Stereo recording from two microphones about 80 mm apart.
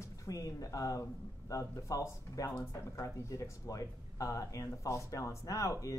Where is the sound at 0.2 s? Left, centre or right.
Left.